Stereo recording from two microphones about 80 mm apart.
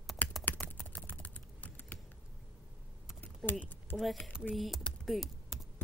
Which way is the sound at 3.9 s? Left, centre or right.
Left.